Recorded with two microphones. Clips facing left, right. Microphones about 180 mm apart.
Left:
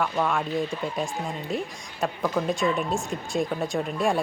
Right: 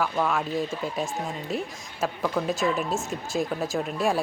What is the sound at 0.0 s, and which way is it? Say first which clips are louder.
Speech: even; centre (ahead or behind).